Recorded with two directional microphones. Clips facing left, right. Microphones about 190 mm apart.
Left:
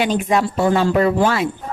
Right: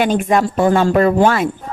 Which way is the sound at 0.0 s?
50° right (ahead or behind).